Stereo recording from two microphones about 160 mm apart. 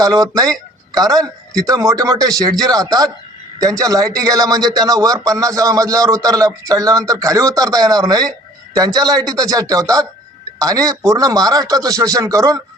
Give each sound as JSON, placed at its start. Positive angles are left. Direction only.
{"t": 0.0, "sound": "speech", "side_deg": -25}